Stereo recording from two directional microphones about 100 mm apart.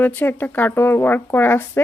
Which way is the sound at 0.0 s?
20° left (ahead or behind).